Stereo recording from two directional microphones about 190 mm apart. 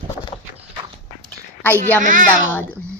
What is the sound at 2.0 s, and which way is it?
Speech, 45° right (ahead or behind).